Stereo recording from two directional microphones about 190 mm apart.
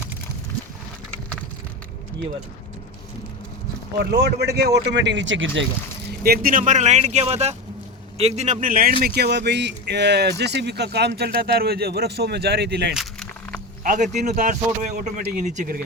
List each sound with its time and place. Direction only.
4.1 s speech: 55° right (ahead or behind); by 5.6 s 80° right
6.2 s speech: 50° right (ahead or behind)
12.9 s a sound: centre (ahead or behind)
13.8 s speech: 45° right (ahead or behind)